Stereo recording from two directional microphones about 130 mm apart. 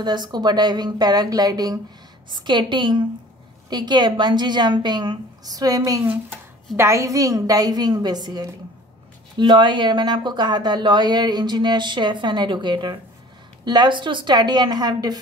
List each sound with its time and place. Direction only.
0.0 s a woman's voice: 35° right (ahead or behind)